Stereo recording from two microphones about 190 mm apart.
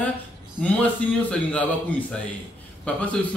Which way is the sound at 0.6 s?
5° left (ahead or behind).